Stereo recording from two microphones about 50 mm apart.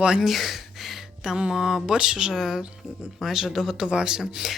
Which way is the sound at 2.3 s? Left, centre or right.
Centre.